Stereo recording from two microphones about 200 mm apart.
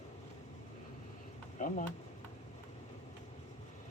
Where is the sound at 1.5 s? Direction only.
40° left (ahead or behind).